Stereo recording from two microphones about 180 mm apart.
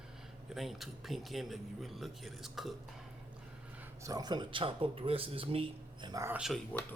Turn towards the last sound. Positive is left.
turn(degrees=10)  # may be behind; listen again after turning